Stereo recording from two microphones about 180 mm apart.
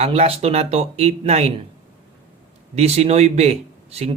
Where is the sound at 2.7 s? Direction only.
35° right (ahead or behind).